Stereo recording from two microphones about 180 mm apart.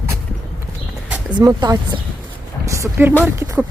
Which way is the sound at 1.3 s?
20° right (ahead or behind).